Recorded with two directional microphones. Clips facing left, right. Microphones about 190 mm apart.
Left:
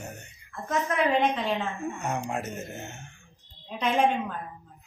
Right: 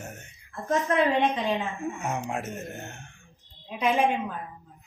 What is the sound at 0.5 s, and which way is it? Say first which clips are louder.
Speech: right 3 dB; 35° right (ahead or behind).